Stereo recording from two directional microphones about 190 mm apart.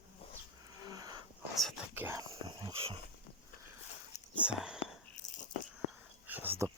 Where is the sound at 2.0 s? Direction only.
15° right (ahead or behind); by 3.0 s 30° right (ahead or behind).